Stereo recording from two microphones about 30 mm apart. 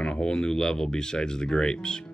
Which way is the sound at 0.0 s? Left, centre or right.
Left.